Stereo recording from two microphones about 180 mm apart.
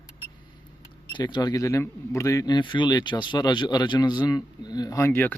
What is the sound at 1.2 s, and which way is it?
Speech, 20° left (ahead or behind).